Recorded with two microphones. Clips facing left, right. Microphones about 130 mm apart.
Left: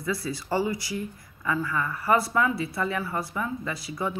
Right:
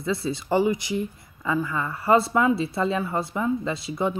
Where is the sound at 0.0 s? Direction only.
25° right (ahead or behind).